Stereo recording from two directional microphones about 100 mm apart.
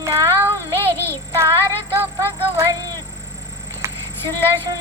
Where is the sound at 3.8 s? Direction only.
30° right (ahead or behind).